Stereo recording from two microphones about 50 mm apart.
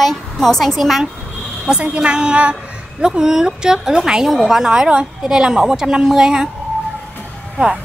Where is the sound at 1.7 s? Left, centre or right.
Centre.